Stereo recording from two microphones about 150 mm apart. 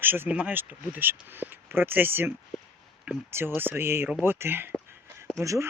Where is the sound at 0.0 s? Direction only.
15° right (ahead or behind).